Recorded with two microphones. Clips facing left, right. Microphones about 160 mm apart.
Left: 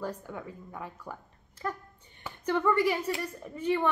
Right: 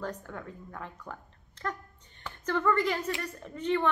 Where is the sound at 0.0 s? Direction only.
10° left (ahead or behind).